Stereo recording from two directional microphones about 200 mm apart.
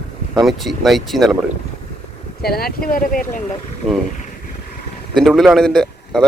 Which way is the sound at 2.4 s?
50° left (ahead or behind).